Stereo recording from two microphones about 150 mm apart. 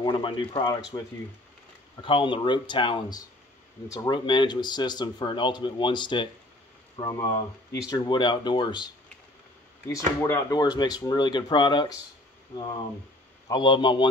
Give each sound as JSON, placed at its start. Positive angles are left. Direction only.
{"t": 0.0, "sound": "speech", "side_deg": 35}
{"t": 9.8, "sound": "speech", "side_deg": 20}